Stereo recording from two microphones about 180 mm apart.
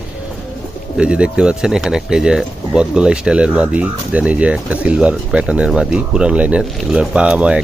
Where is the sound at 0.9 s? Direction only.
5° right (ahead or behind).